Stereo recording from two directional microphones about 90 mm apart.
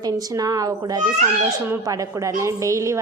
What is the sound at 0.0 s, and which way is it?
A woman's voice, 40° right (ahead or behind).